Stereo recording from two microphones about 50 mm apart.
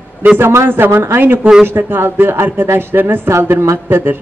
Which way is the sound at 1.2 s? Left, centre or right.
Right.